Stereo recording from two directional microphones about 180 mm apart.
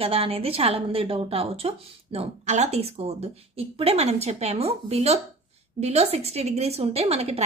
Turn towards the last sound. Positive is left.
turn(degrees=-35)  # may be behind; listen again after turning